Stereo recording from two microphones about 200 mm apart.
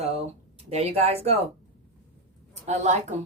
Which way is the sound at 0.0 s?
30° right (ahead or behind).